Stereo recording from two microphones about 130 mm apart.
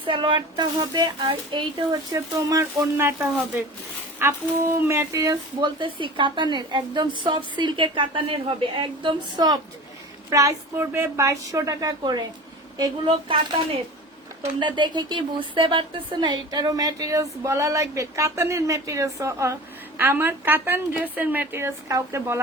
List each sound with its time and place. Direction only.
0.0 s speech: 40° right (ahead or behind)
2.1 s a woman's voice: 25° right (ahead or behind)